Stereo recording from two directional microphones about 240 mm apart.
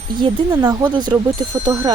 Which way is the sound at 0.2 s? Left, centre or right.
Centre.